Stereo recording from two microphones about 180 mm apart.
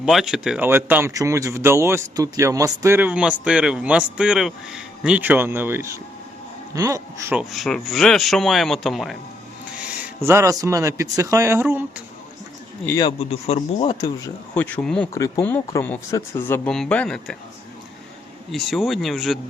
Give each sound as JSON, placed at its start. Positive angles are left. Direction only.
{"t": 0.0, "sound": "speech", "side_deg": 0}
{"t": 7.5, "sound": "speech", "side_deg": 0}
{"t": 10.0, "sound": "speech", "side_deg": -10}
{"t": 13.0, "sound": "speech", "side_deg": 30}
{"t": 14.5, "sound": "speech", "side_deg": 5}
{"t": 18.5, "sound": "speech", "side_deg": 0}